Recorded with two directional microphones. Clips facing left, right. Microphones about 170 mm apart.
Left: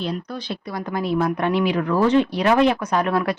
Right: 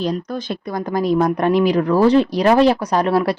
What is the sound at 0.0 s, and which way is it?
Speech, 45° right (ahead or behind).